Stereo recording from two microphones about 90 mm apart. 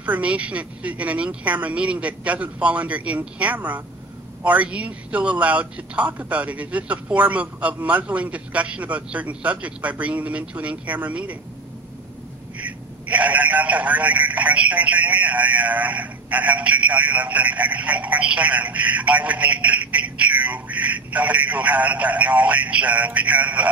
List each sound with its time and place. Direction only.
0.0 s speech: 15° right (ahead or behind)
12.6 s speech: 15° right (ahead or behind)